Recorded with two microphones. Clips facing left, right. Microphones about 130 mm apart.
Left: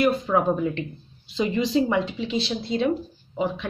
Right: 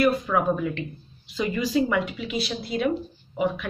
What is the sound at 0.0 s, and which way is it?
A woman's voice, 25° left (ahead or behind).